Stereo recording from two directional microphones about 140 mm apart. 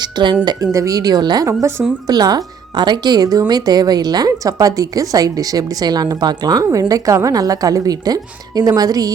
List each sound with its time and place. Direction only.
0.0 s speech: 35° right (ahead or behind)
0.4 s a woman's voice: 25° right (ahead or behind)